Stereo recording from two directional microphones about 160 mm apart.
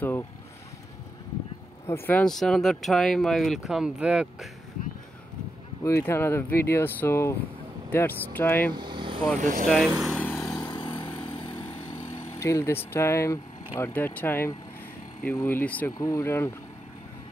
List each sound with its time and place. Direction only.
1.9 s speech: 15° left (ahead or behind); by 4.5 s 5° right (ahead or behind)
5.9 s speech: 15° left (ahead or behind)
8.7 s speech: 30° right (ahead or behind)
9.4 s speech: 55° right (ahead or behind)
10.0 s vehicle: 10° left (ahead or behind)
10.6 s vehicle: 30° left (ahead or behind)
12.4 s speech: 20° left (ahead or behind)